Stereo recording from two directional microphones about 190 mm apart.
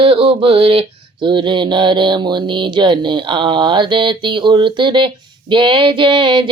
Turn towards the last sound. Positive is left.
turn(degrees=-25)  # may be behind; listen again after turning